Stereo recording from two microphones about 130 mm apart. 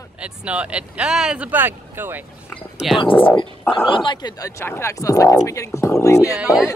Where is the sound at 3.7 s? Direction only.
40° left (ahead or behind).